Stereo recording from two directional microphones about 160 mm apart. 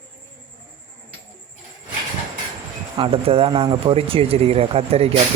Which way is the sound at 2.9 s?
35° right (ahead or behind).